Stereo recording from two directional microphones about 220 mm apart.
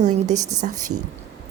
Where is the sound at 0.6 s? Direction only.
35° right (ahead or behind).